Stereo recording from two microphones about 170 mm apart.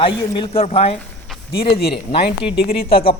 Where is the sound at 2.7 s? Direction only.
70° left (ahead or behind).